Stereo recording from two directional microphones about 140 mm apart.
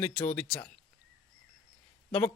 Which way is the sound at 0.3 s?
5° left (ahead or behind).